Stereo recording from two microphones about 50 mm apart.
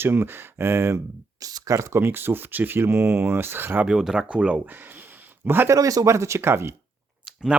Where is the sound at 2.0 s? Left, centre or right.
Right.